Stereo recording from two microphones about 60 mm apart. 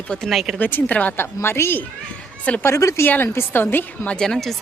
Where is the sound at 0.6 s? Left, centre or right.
Left.